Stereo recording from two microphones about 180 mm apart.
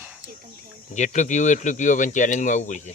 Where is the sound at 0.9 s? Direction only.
40° left (ahead or behind).